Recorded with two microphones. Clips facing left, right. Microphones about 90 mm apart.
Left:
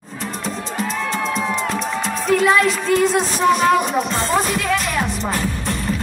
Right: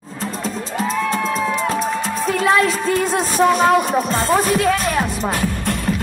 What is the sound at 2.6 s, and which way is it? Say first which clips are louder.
Speech: left 1 dB; 40° right (ahead or behind).